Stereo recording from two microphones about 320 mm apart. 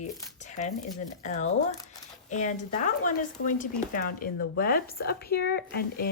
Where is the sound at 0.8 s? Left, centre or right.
Left.